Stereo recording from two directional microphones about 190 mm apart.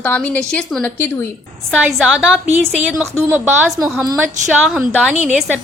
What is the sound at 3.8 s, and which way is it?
A woman's voice, 5° right (ahead or behind).